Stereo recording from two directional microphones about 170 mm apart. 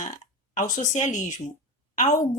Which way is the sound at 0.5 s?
45° left (ahead or behind).